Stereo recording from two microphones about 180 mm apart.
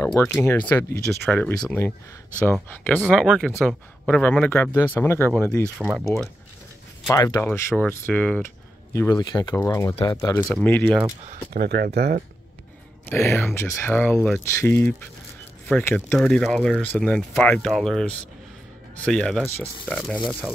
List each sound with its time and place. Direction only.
0.0 s speech: 15° left (ahead or behind)
5.8 s speech: 5° right (ahead or behind)
7.1 s speech: 20° left (ahead or behind)
7.4 s speech: 5° left (ahead or behind)
8.9 s speech: 15° left (ahead or behind)
11.5 s speech: 65° right (ahead or behind)
13.1 s speech: 10° left (ahead or behind)